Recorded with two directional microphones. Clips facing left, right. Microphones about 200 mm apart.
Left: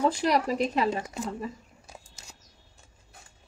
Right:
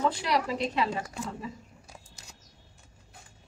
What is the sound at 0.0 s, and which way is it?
Speech, 45° left (ahead or behind).